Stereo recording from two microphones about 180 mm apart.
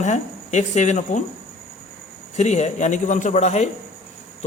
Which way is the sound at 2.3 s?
40° left (ahead or behind).